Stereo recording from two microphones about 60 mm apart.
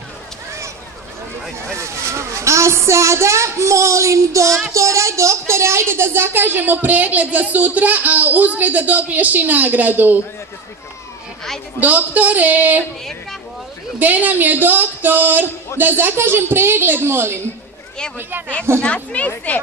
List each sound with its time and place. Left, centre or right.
1.8 s a woman's voice: right
11.8 s a woman's voice: right
13.9 s a woman's voice: right
18.9 s speech: left